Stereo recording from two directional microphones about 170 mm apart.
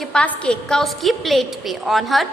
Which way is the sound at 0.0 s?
5° left (ahead or behind).